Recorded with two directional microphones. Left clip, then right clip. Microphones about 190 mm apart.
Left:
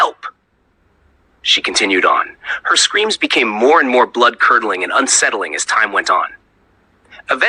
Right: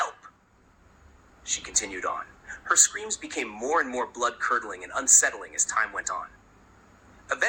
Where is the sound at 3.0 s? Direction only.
50° left (ahead or behind).